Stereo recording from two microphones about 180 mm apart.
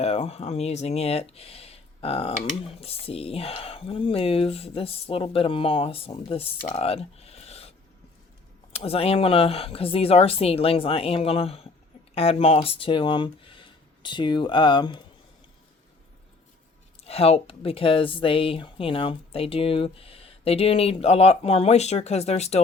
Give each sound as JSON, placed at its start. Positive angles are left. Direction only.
{"t": 0.0, "sound": "speech", "side_deg": 35}
{"t": 8.7, "sound": "speech", "side_deg": 35}
{"t": 17.0, "sound": "speech", "side_deg": 35}